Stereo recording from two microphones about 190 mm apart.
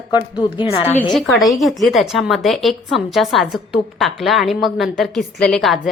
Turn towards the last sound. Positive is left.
turn(degrees=0)  # may be behind; listen again after turning